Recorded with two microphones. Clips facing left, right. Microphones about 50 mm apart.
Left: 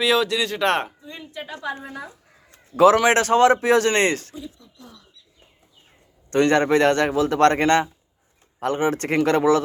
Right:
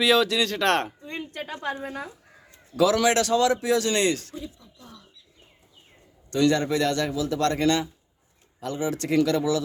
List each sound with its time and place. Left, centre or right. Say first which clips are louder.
0.0 s speech: left 1 dB; centre
1.0 s a woman's voice: right 1 dB; right
2.5 s a man's voice: left 7 dB; left
4.6 s wild animals: left 2 dB; centre
6.3 s a man's voice: left 5 dB; left